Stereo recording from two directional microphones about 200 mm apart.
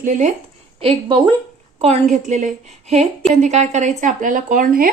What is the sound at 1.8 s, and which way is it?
A woman's voice, 35° right (ahead or behind).